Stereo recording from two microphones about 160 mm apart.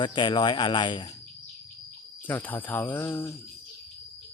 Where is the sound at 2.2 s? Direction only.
10° left (ahead or behind).